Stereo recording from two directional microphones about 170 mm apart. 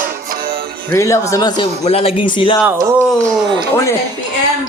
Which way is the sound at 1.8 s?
35° left (ahead or behind).